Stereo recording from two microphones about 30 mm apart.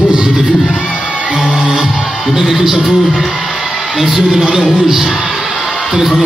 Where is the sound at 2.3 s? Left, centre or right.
Centre.